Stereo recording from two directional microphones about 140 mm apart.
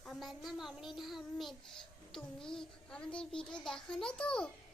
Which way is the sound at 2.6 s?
5° left (ahead or behind).